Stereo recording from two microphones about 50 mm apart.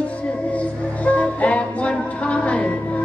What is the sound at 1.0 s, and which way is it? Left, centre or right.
Music, left.